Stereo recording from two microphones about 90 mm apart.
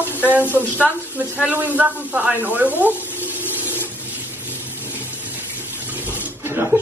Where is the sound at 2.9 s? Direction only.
25° left (ahead or behind).